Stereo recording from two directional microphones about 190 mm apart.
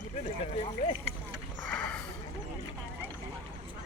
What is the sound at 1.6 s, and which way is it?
Sniff, 10° left (ahead or behind).